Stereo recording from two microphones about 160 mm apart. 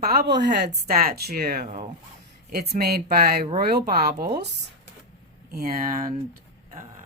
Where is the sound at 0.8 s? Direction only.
70° right (ahead or behind).